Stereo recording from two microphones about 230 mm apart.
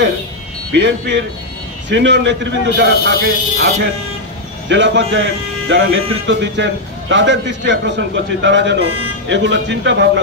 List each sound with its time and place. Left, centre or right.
0.7 s a man's voice: right